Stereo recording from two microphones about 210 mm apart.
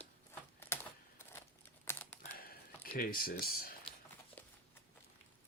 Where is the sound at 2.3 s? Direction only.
45° left (ahead or behind).